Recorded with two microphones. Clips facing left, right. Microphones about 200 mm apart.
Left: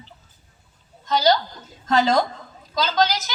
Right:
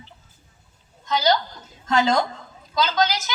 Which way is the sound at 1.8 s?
50° left (ahead or behind).